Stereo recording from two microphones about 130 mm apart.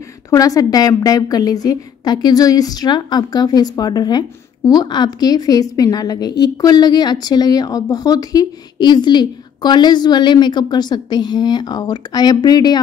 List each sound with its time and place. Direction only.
0.3 s a woman's voice: 25° left (ahead or behind)